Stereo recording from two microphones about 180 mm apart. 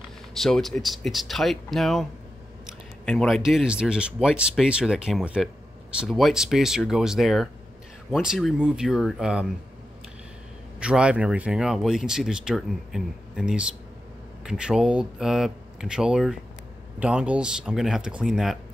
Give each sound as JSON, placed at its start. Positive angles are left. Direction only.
{"t": 0.4, "sound": "speech", "side_deg": 0}
{"t": 3.1, "sound": "speech", "side_deg": 5}
{"t": 10.8, "sound": "speech", "side_deg": -5}